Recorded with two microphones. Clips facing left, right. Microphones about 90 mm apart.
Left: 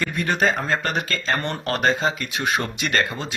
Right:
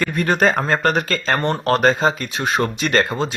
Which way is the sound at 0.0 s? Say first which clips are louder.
Right 4 dB; 45° right (ahead or behind).